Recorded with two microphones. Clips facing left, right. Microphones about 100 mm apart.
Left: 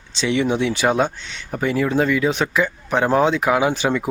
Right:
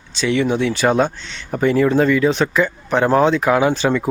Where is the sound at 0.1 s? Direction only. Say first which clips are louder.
Right 2 dB; 20° left (ahead or behind).